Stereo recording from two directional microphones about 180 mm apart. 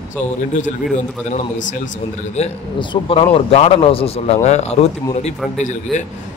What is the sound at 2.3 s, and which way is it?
Speech, 30° left (ahead or behind).